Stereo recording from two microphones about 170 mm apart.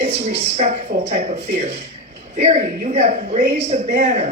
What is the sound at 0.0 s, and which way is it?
Speech, 40° right (ahead or behind).